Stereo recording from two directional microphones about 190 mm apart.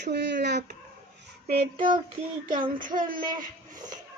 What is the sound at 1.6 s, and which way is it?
Child singing, 25° right (ahead or behind).